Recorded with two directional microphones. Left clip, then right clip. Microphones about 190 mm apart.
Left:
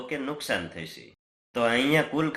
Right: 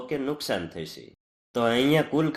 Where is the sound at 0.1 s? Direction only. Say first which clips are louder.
Right 1 dB; 40° right (ahead or behind).